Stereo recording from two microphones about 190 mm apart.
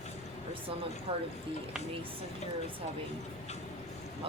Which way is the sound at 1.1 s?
30° right (ahead or behind).